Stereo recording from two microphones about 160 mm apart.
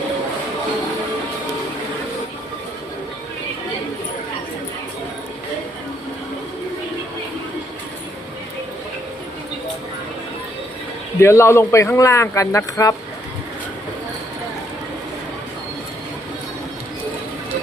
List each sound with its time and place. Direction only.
11.2 s speech: 15° left (ahead or behind)